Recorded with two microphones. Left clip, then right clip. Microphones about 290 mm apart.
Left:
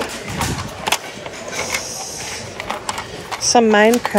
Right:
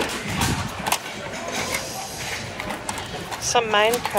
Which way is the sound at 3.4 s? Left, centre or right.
Left.